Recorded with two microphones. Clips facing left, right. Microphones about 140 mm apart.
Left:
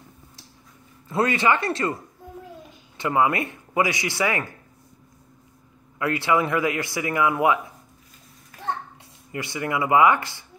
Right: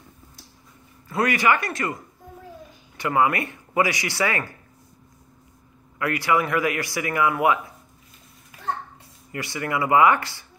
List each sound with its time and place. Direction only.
1.0 s a man's voice: 25° left (ahead or behind)
3.0 s a man's voice: 20° left (ahead or behind)
5.9 s a man's voice: 25° left (ahead or behind)
9.3 s a man's voice: 20° left (ahead or behind)